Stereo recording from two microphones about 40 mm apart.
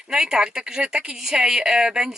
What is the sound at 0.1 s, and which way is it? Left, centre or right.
A man's voice, centre.